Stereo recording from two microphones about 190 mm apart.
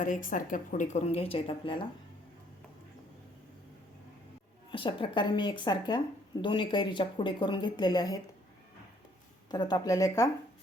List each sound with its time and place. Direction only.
0.0 s a woman's voice: 45° left (ahead or behind); by 1.9 s 25° left (ahead or behind)
4.7 s speech: 25° left (ahead or behind)
9.5 s speech: 20° left (ahead or behind)